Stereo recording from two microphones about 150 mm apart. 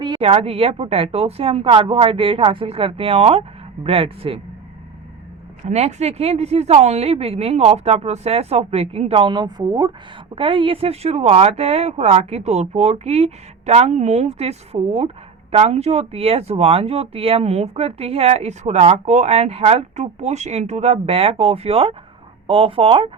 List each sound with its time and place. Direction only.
0.0 s speech: 35° right (ahead or behind)
5.6 s speech: 45° right (ahead or behind)